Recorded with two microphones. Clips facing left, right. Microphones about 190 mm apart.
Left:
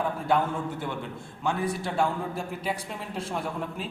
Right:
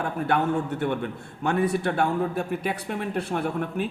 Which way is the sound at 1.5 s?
65° right (ahead or behind).